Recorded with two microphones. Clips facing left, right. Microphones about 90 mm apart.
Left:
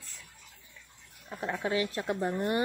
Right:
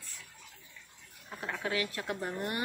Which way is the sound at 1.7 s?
25° left (ahead or behind).